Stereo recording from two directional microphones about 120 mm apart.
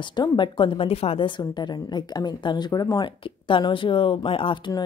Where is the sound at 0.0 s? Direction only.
40° left (ahead or behind).